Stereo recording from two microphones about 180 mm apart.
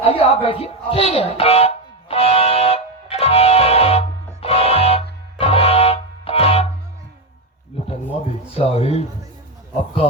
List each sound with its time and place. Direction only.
0.0 s music: 30° left (ahead or behind)
8.5 s speech: 35° left (ahead or behind)